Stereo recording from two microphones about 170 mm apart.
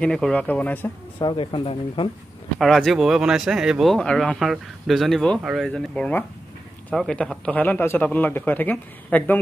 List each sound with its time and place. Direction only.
0.0 s speech: 5° left (ahead or behind)
1.2 s speech: 30° left (ahead or behind)
2.6 s speech: centre (ahead or behind)